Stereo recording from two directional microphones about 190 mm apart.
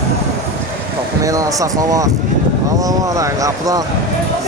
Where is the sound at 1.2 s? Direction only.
15° right (ahead or behind).